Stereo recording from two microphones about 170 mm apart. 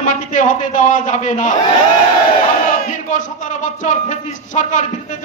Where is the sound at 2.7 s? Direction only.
45° left (ahead or behind).